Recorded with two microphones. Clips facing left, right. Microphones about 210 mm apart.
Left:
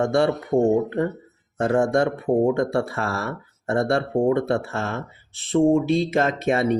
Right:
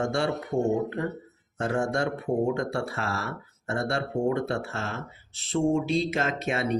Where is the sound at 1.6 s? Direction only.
55° left (ahead or behind).